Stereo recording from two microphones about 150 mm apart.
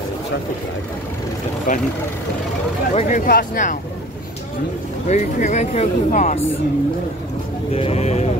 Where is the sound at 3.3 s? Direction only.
70° left (ahead or behind).